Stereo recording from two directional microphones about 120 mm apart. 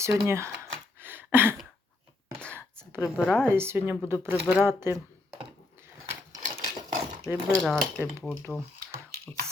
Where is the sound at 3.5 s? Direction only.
20° right (ahead or behind).